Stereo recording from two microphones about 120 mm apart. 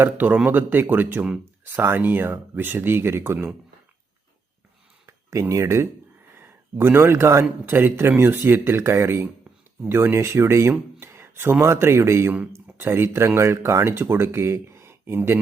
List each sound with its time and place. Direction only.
0.0 s speech: 15° right (ahead or behind)
5.0 s speech: 25° right (ahead or behind)